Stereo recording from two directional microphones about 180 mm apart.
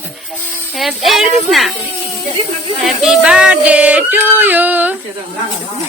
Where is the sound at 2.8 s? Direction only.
Centre (ahead or behind).